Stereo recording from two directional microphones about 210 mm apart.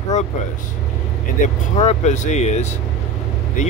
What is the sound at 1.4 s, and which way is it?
Speech, 40° left (ahead or behind).